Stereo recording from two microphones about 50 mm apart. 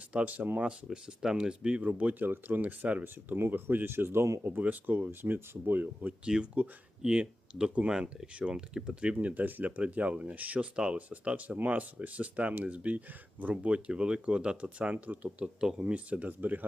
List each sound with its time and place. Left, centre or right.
0.1 s speech: right
0.9 s speech: centre
1.8 s speech: right
3.0 s speech: right
4.4 s speech: right
6.2 s speech: centre
8.4 s speech: right
9.1 s speech: right
14.9 s speech: right